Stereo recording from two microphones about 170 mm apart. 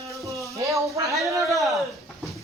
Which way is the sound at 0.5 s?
20° right (ahead or behind).